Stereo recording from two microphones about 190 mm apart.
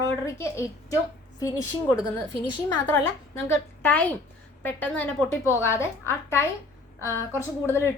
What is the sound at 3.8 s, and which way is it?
A woman's voice, 10° left (ahead or behind).